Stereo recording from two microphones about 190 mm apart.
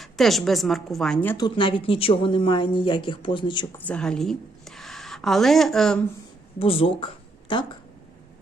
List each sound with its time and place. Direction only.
0.0 s a woman's voice: centre (ahead or behind)
1.4 s speech: 25° left (ahead or behind)
3.8 s a woman's voice: 5° left (ahead or behind)
6.6 s speech: 30° left (ahead or behind)